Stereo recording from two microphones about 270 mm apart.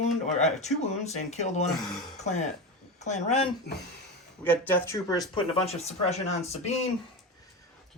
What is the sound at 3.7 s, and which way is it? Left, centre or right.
Speech, left.